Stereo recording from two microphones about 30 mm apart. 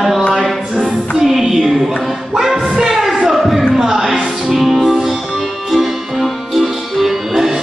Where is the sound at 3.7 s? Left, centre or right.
Centre.